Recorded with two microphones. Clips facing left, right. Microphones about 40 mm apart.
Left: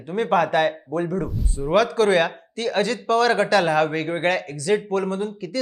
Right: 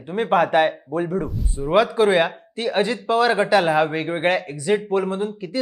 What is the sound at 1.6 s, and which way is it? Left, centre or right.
Speech, centre.